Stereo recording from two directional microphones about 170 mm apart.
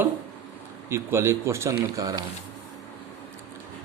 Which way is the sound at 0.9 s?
15° right (ahead or behind).